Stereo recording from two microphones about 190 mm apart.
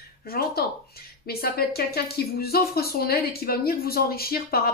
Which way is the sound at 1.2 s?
55° left (ahead or behind).